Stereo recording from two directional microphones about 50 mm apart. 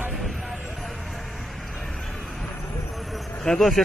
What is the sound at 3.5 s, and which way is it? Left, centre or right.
Speech, centre.